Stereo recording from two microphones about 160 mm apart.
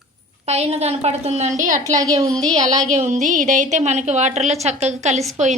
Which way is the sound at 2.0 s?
20° right (ahead or behind).